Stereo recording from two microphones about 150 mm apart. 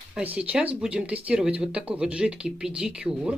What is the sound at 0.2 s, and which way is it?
Speech, 10° right (ahead or behind).